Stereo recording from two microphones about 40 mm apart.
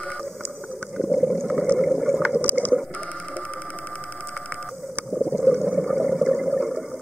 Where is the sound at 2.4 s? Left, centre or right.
Left.